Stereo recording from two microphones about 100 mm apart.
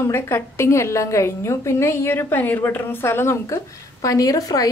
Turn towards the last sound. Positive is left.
turn(degrees=35)  # may be behind; listen again after turning